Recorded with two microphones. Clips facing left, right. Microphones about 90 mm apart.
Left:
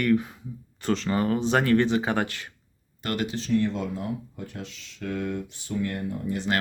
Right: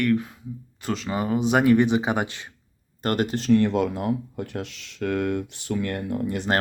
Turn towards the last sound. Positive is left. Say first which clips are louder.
# right 3 dB
turn(degrees=-65)  # may be behind; listen again after turning